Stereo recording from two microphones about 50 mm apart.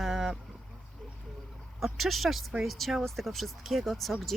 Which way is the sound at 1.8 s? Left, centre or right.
Centre.